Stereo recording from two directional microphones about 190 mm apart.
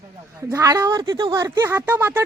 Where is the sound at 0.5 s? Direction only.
20° right (ahead or behind).